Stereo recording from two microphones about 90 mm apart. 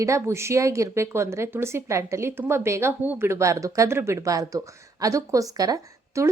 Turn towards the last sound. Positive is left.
turn(degrees=-35)  # may be behind; listen again after turning